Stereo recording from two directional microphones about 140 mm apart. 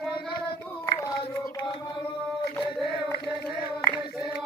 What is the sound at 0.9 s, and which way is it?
Hands, 25° left (ahead or behind).